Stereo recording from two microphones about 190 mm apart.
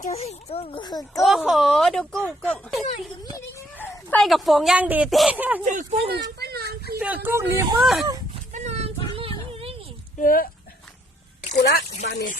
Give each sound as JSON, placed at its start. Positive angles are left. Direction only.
{"t": 0.0, "sound": "a child's voice", "side_deg": 35}
{"t": 1.2, "sound": "speech", "side_deg": 0}
{"t": 5.6, "sound": "speech", "side_deg": -35}
{"t": 6.4, "sound": "a sound", "side_deg": -55}
{"t": 7.0, "sound": "speech", "side_deg": -10}
{"t": 8.5, "sound": "a sound", "side_deg": -35}
{"t": 10.2, "sound": "speech", "side_deg": 50}
{"t": 11.5, "sound": "speech", "side_deg": 55}